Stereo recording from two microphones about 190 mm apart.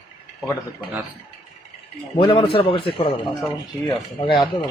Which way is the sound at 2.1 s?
30° left (ahead or behind).